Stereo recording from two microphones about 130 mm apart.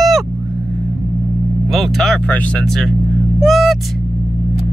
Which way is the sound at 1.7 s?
Centre (ahead or behind).